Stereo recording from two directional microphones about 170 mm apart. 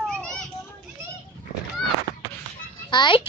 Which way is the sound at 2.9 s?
25° left (ahead or behind).